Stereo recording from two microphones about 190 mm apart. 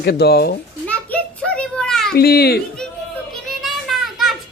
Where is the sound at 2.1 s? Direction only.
55° left (ahead or behind).